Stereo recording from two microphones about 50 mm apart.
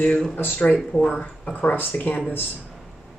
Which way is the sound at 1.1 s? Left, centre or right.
Left.